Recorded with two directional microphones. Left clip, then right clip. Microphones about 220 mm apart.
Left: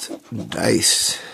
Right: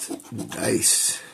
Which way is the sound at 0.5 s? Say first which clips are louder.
Left 6 dB; 40° left (ahead or behind).